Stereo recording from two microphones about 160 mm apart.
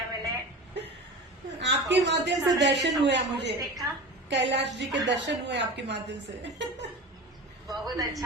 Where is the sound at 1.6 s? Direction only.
90° right.